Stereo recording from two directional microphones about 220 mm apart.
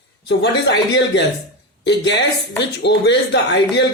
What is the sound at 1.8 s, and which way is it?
Speech, 50° left (ahead or behind).